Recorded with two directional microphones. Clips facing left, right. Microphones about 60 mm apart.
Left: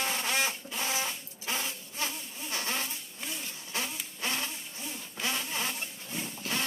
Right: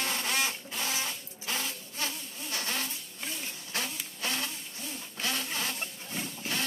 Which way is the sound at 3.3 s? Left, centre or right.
Left.